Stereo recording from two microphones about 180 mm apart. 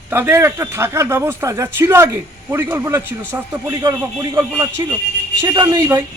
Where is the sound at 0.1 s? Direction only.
15° right (ahead or behind).